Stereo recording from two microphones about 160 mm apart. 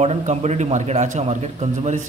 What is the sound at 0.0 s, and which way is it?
A man's voice, 45° right (ahead or behind).